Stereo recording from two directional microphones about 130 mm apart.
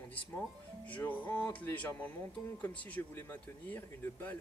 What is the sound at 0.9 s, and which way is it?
Speech, 10° left (ahead or behind).